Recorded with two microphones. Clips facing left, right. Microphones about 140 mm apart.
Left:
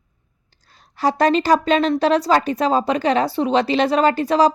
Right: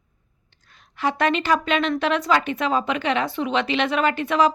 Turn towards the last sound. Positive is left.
turn(degrees=35)  # may be behind; listen again after turning